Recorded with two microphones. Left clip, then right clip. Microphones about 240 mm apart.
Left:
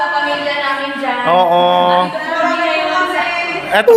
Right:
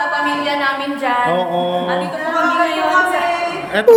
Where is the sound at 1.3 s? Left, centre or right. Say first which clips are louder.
Left 7 dB; centre.